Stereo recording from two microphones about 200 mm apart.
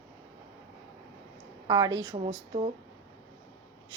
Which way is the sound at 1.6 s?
20° right (ahead or behind).